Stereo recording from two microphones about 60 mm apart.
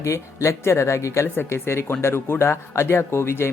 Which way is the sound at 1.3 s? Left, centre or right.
Left.